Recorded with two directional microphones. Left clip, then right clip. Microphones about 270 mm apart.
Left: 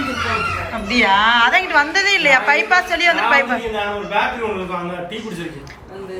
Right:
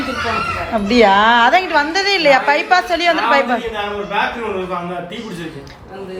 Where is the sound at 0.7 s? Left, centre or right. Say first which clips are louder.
Right 4 dB; centre.